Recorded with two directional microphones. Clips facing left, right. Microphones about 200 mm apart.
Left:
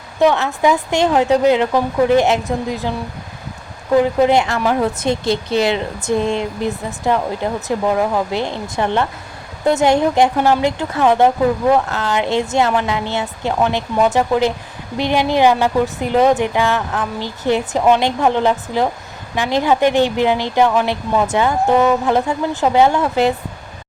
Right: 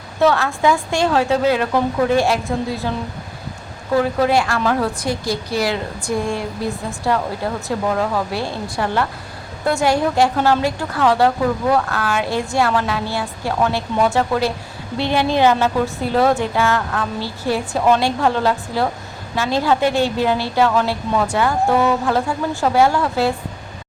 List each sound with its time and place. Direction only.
0.2 s a woman's voice: 15° left (ahead or behind)
3.9 s a woman's voice: 20° left (ahead or behind)